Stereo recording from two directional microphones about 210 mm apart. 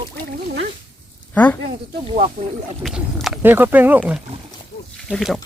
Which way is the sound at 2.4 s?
35° right (ahead or behind).